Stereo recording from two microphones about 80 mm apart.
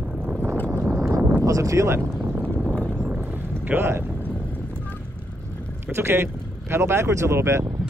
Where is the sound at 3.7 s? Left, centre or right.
Right.